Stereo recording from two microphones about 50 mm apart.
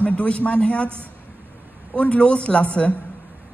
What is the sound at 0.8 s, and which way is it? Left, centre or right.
Speech, right.